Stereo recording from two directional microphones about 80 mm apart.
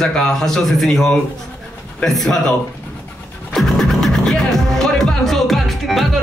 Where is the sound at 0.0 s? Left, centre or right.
Centre.